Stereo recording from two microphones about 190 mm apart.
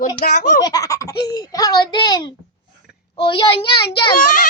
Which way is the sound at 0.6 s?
20° left (ahead or behind).